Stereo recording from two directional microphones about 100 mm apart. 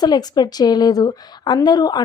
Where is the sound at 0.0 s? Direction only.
45° left (ahead or behind).